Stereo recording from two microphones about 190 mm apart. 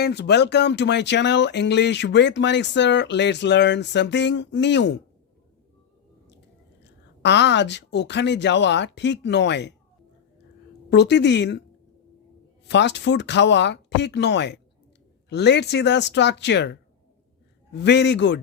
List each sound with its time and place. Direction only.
0.0 s speech: 60° left (ahead or behind)
6.8 s speech: 65° left (ahead or behind)
10.8 s speech: 65° left (ahead or behind)
12.6 s speech: 65° left (ahead or behind)